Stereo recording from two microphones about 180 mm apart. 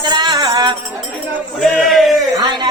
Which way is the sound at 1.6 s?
Centre (ahead or behind).